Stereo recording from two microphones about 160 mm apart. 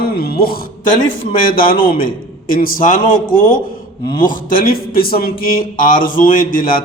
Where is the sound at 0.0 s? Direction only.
70° left (ahead or behind).